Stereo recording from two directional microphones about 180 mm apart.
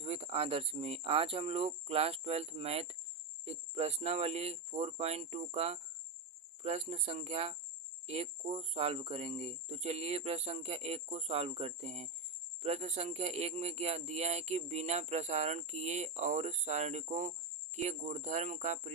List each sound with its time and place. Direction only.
0.0 s speech: 35° right (ahead or behind)